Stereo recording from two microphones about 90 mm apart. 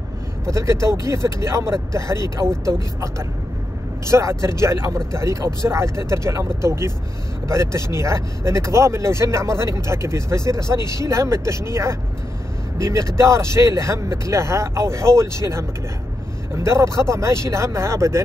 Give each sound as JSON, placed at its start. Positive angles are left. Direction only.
{"t": 0.5, "sound": "speech", "side_deg": -35}